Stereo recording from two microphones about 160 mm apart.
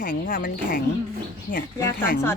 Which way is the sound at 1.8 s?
15° left (ahead or behind).